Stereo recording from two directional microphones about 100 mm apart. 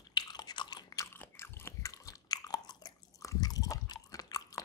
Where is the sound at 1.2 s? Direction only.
25° left (ahead or behind).